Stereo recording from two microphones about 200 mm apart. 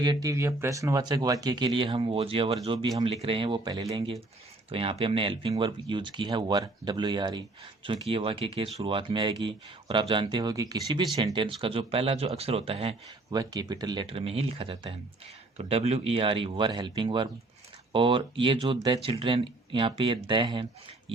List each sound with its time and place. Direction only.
0.0 s speech: 20° right (ahead or behind)